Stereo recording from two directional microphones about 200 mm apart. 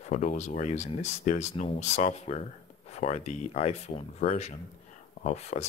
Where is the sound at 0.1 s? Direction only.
35° left (ahead or behind).